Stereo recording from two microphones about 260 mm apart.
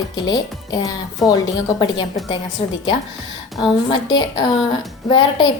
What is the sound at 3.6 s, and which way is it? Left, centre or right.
A woman's voice, centre.